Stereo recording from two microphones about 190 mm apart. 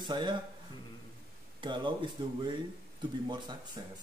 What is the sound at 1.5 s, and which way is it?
Speech, 25° right (ahead or behind).